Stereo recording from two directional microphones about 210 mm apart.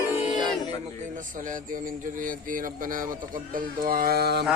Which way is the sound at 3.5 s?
45° right (ahead or behind).